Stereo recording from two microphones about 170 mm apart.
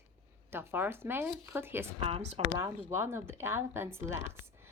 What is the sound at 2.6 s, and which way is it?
Speech, 15° right (ahead or behind).